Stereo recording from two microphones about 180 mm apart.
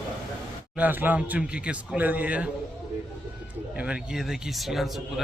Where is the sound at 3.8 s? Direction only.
5° right (ahead or behind).